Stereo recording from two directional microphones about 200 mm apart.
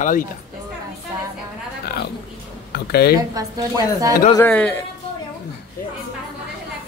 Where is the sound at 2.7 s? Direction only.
50° left (ahead or behind).